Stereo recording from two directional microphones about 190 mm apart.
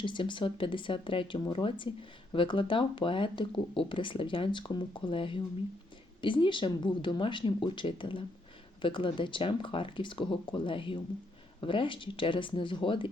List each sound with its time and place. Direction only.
0.0 s speech: 25° left (ahead or behind)